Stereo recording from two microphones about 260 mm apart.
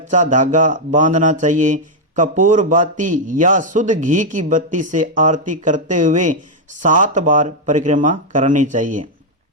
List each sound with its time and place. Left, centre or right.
0.1 s a man's voice: right